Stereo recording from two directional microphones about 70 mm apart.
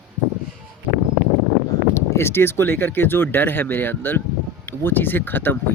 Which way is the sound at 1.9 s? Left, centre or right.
Left.